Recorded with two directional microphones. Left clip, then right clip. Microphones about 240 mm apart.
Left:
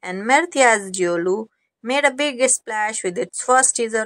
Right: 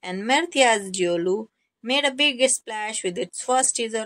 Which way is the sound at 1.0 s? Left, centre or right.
Centre.